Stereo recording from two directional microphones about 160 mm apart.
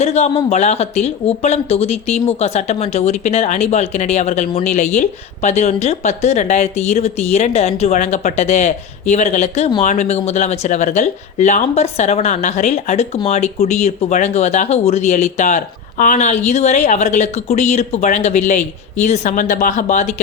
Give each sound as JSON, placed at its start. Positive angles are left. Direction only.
{"t": 0.0, "sound": "speech", "side_deg": 45}